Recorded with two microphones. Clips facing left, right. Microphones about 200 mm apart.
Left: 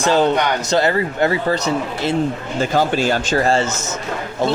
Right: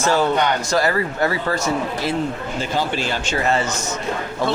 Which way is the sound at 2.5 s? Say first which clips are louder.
Left 6 dB; 45° left (ahead or behind).